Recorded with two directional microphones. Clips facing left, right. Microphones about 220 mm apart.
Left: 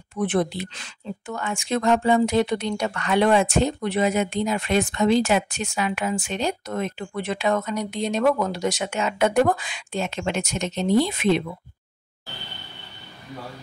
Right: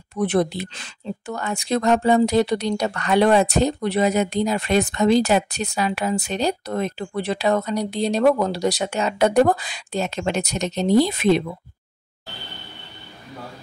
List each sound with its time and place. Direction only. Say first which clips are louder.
0.1 s speech: right 3 dB; 40° right (ahead or behind)